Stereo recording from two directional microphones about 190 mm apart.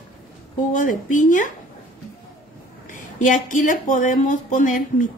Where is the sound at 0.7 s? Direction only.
45° left (ahead or behind).